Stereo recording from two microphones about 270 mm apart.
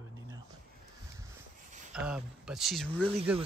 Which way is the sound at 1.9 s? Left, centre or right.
Centre.